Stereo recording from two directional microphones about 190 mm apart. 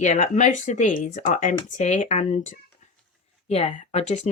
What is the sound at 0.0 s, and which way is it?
Speech, 40° left (ahead or behind).